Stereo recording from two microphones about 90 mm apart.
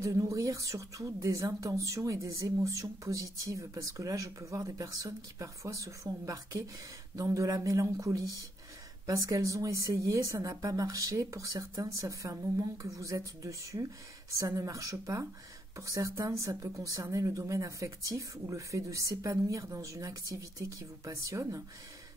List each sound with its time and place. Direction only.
0.0 s a woman's voice: 35° right (ahead or behind)